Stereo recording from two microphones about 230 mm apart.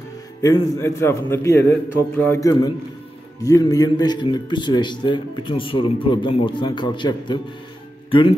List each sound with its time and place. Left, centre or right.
0.4 s a man's voice: centre